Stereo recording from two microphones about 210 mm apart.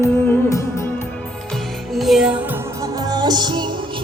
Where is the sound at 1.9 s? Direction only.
Centre (ahead or behind).